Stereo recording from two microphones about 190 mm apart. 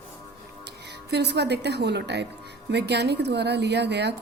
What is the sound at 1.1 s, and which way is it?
Speech, 60° right (ahead or behind).